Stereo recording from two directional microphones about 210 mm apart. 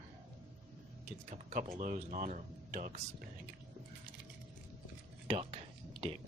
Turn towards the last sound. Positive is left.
turn(degrees=-25)  # may be behind; listen again after turning